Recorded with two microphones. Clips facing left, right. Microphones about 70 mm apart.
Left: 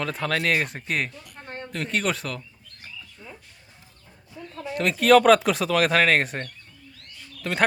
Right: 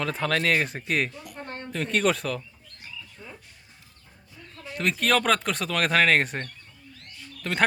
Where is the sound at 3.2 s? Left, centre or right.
Centre.